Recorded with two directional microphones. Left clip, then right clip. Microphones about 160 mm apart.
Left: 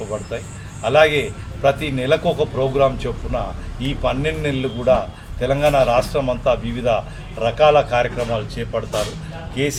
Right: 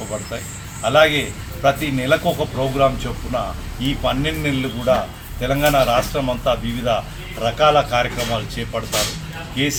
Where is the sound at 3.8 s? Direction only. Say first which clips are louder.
Even; 15° left (ahead or behind).